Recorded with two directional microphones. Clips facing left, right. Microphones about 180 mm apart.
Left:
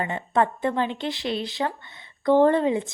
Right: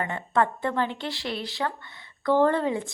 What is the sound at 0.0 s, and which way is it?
A woman's voice, 20° left (ahead or behind).